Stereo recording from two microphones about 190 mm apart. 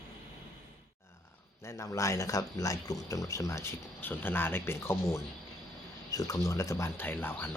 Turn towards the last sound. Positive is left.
turn(degrees=10)  # may be behind; listen again after turning